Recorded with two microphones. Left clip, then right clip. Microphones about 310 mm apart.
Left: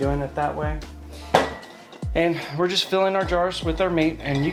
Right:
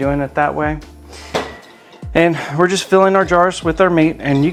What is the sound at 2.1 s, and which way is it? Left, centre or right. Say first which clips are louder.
Speech: right 9 dB; right.